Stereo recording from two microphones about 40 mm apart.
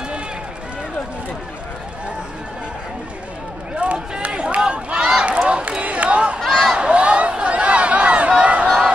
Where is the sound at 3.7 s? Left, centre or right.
Right.